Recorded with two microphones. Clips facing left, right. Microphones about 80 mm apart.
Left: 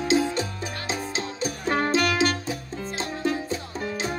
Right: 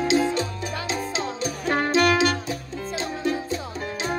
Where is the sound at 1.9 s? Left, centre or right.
Right.